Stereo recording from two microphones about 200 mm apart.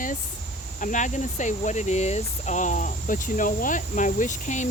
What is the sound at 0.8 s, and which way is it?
Speech, 40° left (ahead or behind).